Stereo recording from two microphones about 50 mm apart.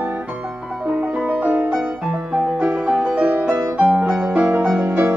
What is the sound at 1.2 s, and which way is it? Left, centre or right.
Music, right.